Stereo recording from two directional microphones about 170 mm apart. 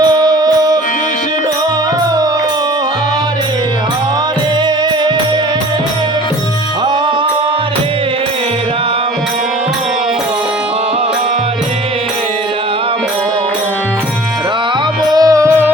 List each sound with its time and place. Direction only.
0.0 s music: 25° right (ahead or behind)
15.1 s music: 20° right (ahead or behind)